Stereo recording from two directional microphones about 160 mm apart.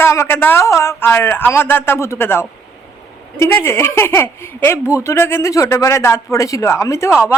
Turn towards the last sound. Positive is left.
turn(degrees=15)  # may be behind; listen again after turning